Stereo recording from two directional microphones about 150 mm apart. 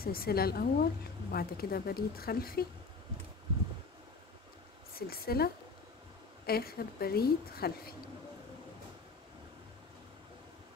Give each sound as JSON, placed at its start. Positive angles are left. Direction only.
{"t": 0.0, "sound": "a woman's voice", "side_deg": 90}
{"t": 4.9, "sound": "a woman's voice", "side_deg": 90}